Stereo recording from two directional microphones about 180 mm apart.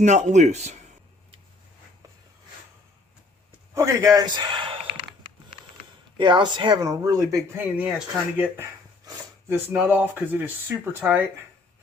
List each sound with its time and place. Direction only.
0.0 s speech: 40° right (ahead or behind)
3.8 s speech: 20° right (ahead or behind)
6.1 s speech: 25° right (ahead or behind); by 8.6 s 5° right (ahead or behind)
9.7 s speech: 10° right (ahead or behind)